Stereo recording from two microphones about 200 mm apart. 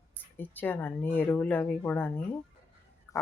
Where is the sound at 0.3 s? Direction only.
10° left (ahead or behind).